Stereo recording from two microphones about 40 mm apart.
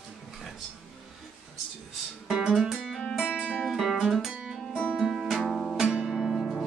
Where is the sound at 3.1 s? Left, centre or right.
Centre.